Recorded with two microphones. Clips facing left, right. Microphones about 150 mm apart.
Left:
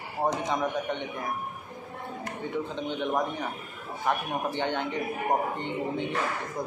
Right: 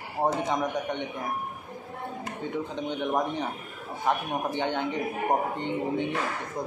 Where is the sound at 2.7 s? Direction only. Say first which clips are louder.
Right 2 dB; 15° right (ahead or behind).